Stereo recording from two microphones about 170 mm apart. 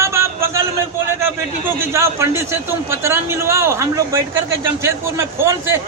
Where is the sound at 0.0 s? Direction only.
15° right (ahead or behind).